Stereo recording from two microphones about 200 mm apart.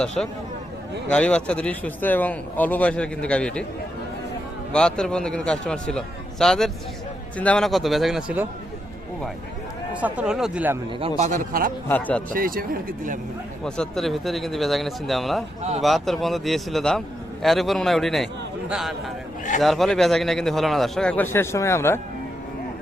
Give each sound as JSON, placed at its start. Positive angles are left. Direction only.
{"t": 1.0, "sound": "speech", "side_deg": 5}
{"t": 4.7, "sound": "speech", "side_deg": 5}
{"t": 10.0, "sound": "speech", "side_deg": -5}
{"t": 11.2, "sound": "a man's voice", "side_deg": -40}
{"t": 11.9, "sound": "a man's voice", "side_deg": 10}
{"t": 12.3, "sound": "speech", "side_deg": -45}
{"t": 13.7, "sound": "speech", "side_deg": 5}